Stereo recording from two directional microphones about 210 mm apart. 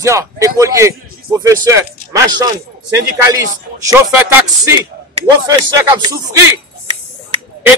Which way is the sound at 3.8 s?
10° right (ahead or behind).